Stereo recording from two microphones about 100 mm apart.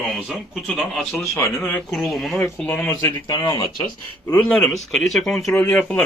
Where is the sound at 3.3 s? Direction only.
40° left (ahead or behind).